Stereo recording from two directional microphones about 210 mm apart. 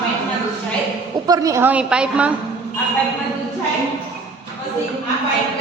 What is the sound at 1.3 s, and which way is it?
A woman's voice, 15° right (ahead or behind).